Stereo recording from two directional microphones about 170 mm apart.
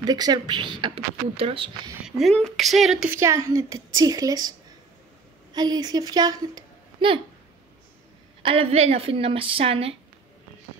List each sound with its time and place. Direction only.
0.0 s speech: 25° right (ahead or behind)
2.0 s speech: centre (ahead or behind)
3.1 s speech: 15° right (ahead or behind)
8.4 s a woman's voice: 30° right (ahead or behind)